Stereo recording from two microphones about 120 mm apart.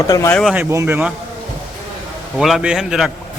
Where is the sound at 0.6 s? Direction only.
20° right (ahead or behind).